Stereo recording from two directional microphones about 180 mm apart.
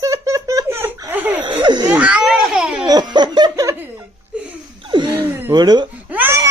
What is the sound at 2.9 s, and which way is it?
Laughter, 25° right (ahead or behind).